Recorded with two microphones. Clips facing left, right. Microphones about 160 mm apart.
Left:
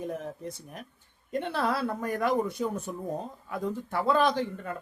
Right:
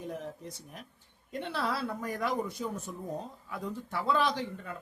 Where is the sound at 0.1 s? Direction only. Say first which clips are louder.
Left 4 dB; 50° left (ahead or behind).